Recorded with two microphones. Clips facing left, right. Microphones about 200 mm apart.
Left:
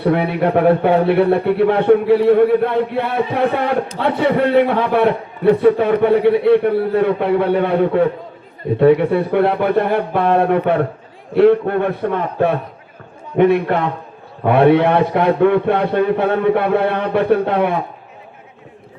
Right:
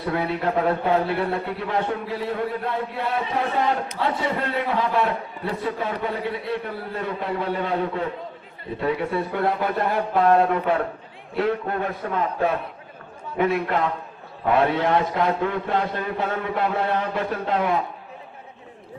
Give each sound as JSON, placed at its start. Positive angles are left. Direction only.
{"t": 0.0, "sound": "a man's voice", "side_deg": 65}